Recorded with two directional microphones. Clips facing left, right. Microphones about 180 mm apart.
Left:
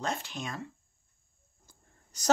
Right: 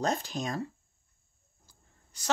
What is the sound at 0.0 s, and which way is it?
Speech, 40° right (ahead or behind).